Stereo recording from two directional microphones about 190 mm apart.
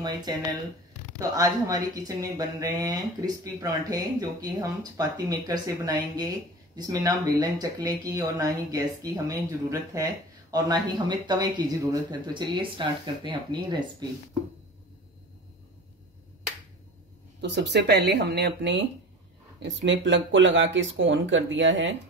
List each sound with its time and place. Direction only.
0.0 s speech: 20° right (ahead or behind)
10.5 s speech: 25° right (ahead or behind)
17.4 s speech: 65° right (ahead or behind); by 21.9 s 80° right